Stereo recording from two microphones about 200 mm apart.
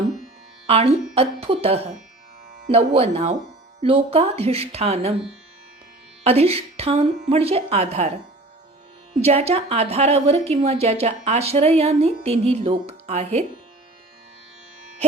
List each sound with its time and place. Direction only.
0.7 s a woman's voice: 30° right (ahead or behind)
6.2 s a woman's voice: 30° right (ahead or behind)
9.2 s a woman's voice: 30° right (ahead or behind)